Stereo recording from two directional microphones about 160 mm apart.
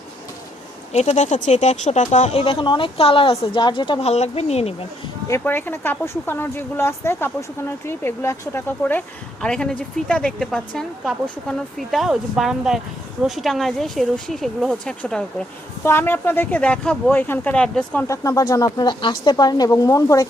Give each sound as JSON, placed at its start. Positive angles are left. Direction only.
{"t": 0.9, "sound": "speech", "side_deg": 45}
{"t": 4.1, "sound": "speech", "side_deg": 45}
{"t": 5.3, "sound": "a woman's voice", "side_deg": 15}
{"t": 18.1, "sound": "speech", "side_deg": 20}